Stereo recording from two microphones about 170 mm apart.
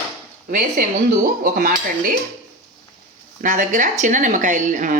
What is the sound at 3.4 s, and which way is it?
A woman's voice, 50° right (ahead or behind).